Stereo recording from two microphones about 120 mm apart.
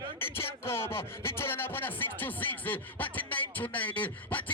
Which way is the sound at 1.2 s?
20° left (ahead or behind).